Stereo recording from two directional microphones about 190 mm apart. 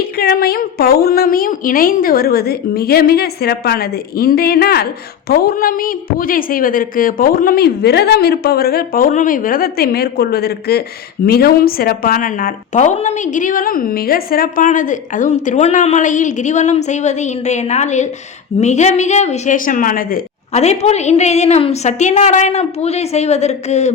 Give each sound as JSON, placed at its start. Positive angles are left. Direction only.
{"t": 0.2, "sound": "a woman's voice", "side_deg": 55}
{"t": 20.5, "sound": "a woman's voice", "side_deg": 35}